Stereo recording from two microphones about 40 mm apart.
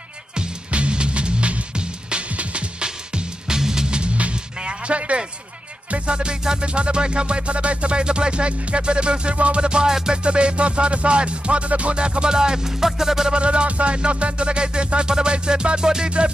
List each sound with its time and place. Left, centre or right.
0.7 s music: right
3.4 s music: centre
13.3 s music: right